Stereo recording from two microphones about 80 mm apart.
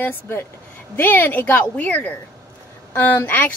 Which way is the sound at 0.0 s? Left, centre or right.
Left.